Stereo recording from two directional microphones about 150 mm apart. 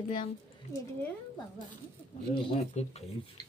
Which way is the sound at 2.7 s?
45° left (ahead or behind).